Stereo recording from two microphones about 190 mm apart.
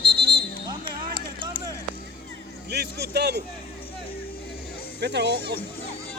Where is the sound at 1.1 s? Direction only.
25° right (ahead or behind).